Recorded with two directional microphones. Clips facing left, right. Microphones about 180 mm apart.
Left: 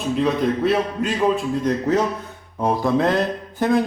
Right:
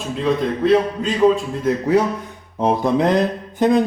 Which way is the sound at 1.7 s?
5° right (ahead or behind).